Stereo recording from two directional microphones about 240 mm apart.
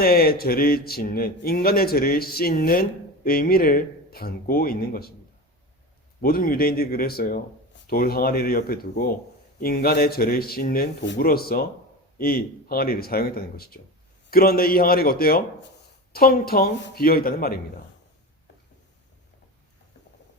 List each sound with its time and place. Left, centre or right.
0.0 s speech: left
6.2 s speech: left